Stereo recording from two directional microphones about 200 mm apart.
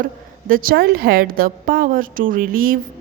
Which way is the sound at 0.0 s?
45° right (ahead or behind).